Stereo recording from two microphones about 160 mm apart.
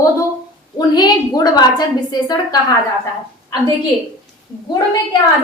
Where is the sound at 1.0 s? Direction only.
25° left (ahead or behind).